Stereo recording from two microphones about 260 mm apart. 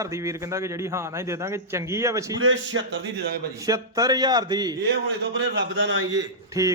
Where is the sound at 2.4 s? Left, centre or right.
Right.